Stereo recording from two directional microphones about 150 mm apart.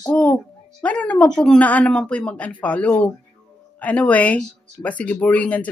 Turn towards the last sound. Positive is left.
turn(degrees=10)  # may be behind; listen again after turning